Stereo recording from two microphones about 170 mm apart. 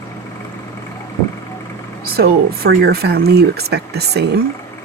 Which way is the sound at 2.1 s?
65° right (ahead or behind).